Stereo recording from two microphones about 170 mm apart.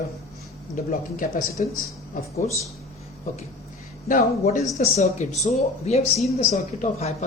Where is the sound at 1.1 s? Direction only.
55° left (ahead or behind).